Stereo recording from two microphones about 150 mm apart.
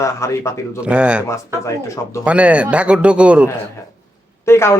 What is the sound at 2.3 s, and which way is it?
Speech, 10° right (ahead or behind).